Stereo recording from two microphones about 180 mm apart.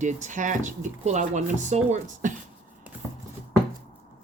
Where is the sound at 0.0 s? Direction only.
45° right (ahead or behind).